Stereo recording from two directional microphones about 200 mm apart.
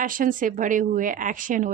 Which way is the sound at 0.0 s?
45° right (ahead or behind).